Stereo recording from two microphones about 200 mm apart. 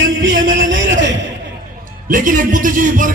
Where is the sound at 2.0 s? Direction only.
40° right (ahead or behind).